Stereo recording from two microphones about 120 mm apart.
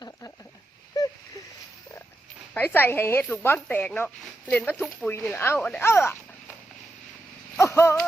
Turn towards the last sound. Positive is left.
turn(degrees=20)  # may be behind; listen again after turning